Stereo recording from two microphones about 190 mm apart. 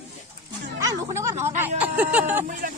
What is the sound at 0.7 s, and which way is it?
Music, 15° right (ahead or behind).